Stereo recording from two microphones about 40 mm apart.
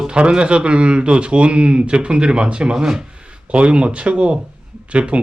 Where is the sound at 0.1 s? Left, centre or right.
Right.